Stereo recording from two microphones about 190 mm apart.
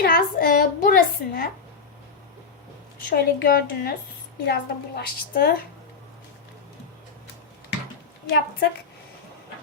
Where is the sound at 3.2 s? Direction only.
55° left (ahead or behind).